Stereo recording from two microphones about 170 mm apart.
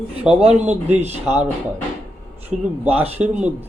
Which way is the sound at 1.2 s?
10° right (ahead or behind).